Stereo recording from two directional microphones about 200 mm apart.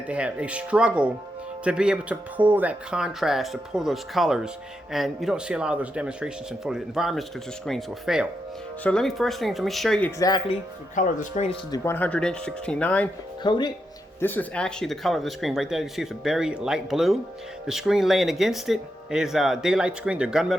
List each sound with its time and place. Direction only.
0.1 s speech: 5° right (ahead or behind)
10.2 s speech: 20° left (ahead or behind)
10.9 s speech: 40° left (ahead or behind)
11.7 s speech: 10° left (ahead or behind)
13.4 s speech: 20° left (ahead or behind)
14.2 s speech: 10° left (ahead or behind)